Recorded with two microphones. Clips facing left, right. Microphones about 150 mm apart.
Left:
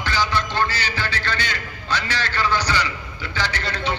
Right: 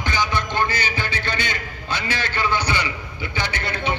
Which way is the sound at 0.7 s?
55° right (ahead or behind).